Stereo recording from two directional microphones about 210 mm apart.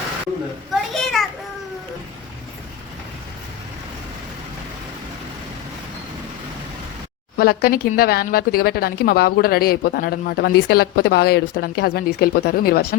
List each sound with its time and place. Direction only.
0.7 s children playing: centre (ahead or behind)
7.3 s speech: 45° left (ahead or behind)